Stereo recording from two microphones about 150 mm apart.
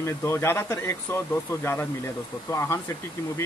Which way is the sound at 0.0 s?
20° left (ahead or behind).